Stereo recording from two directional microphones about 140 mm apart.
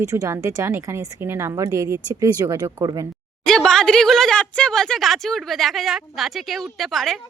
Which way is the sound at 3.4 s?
5° left (ahead or behind).